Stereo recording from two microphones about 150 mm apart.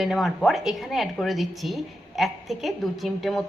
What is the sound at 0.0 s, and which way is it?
A woman's voice, centre (ahead or behind).